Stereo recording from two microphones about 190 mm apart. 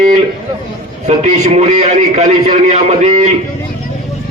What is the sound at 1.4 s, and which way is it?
A man's voice, 35° right (ahead or behind).